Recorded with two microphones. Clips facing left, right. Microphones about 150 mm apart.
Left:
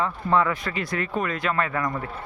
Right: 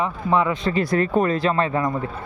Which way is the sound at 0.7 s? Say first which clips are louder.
Right 8 dB; 35° right (ahead or behind).